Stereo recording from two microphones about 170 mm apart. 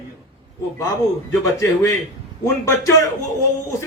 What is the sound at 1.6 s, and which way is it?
Speech, 15° left (ahead or behind).